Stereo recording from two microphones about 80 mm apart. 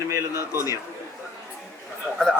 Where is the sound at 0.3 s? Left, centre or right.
Left.